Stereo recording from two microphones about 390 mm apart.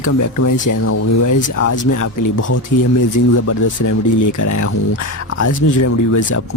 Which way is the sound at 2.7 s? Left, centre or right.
Left.